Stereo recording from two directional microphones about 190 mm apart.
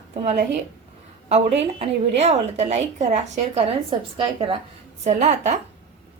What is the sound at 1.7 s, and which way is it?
A woman's voice, 35° right (ahead or behind).